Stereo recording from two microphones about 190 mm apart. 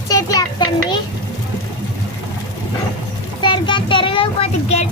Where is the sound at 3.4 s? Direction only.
25° left (ahead or behind).